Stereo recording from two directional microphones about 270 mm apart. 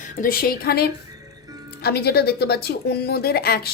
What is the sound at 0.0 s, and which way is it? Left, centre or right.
Speech, left.